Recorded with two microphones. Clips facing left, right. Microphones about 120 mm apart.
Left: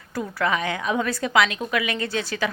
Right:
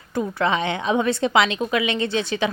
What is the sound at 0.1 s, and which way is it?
A woman's voice, 25° right (ahead or behind).